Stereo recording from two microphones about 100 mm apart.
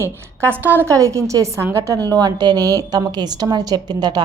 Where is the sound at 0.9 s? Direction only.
30° right (ahead or behind).